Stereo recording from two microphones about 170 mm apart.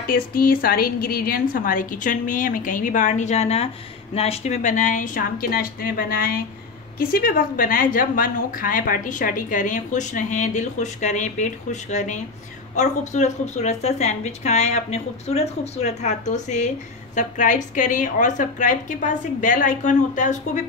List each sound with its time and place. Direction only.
0.0 s speech: 60° left (ahead or behind)